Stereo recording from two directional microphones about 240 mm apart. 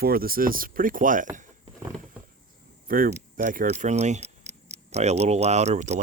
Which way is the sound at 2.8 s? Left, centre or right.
Right.